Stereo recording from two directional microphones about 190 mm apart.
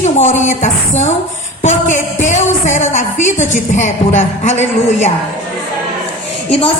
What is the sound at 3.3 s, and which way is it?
Speech, 40° left (ahead or behind).